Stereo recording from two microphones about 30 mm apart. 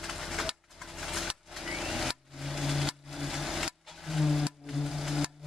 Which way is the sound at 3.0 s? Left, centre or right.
Centre.